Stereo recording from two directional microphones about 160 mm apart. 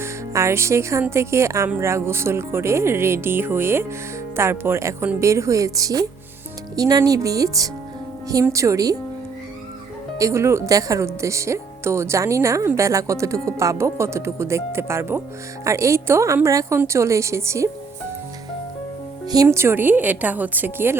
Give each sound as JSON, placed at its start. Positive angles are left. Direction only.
{"t": 0.0, "sound": "a woman's voice", "side_deg": -15}
{"t": 10.2, "sound": "speech", "side_deg": -20}
{"t": 19.3, "sound": "speech", "side_deg": -20}